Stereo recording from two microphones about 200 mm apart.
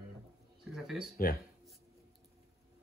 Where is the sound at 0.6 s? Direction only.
Centre (ahead or behind).